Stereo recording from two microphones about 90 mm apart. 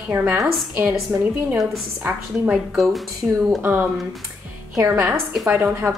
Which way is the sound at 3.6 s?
20° right (ahead or behind).